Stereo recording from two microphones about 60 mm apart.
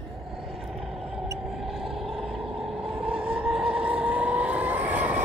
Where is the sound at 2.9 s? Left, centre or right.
Centre.